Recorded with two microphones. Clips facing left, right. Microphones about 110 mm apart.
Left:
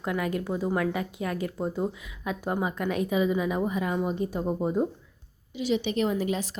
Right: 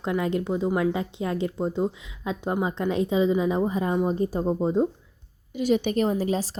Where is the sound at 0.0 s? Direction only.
25° right (ahead or behind).